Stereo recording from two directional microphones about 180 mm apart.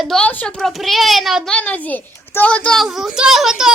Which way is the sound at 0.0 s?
5° left (ahead or behind).